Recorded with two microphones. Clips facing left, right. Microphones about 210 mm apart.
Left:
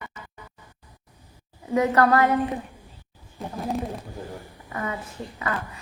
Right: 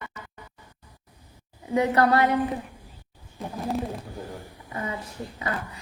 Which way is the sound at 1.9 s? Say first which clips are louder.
Left 1 dB; 30° right (ahead or behind).